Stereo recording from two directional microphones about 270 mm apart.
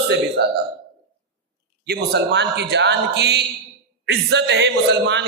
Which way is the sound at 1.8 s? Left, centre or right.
Right.